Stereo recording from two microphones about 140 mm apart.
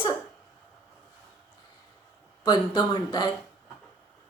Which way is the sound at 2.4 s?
30° left (ahead or behind).